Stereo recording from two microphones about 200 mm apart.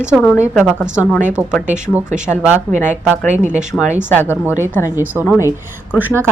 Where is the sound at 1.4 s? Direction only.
10° right (ahead or behind).